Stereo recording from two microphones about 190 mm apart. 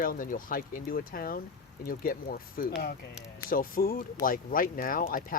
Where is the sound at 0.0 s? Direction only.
45° left (ahead or behind).